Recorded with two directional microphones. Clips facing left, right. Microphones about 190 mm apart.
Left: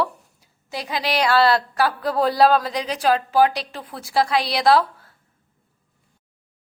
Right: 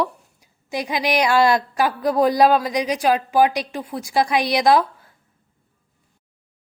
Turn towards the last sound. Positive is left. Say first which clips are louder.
# right 1 dB
turn(degrees=-15)  # may be behind; listen again after turning